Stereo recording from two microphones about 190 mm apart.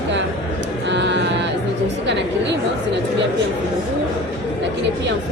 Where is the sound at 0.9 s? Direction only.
70° right (ahead or behind).